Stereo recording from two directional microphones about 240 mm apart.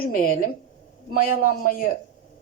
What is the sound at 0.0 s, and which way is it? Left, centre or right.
Speech, left.